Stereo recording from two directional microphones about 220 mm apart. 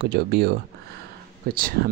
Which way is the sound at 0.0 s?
50° right (ahead or behind).